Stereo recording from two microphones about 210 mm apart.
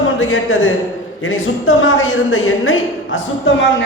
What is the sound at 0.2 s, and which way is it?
A man's voice, 70° left (ahead or behind).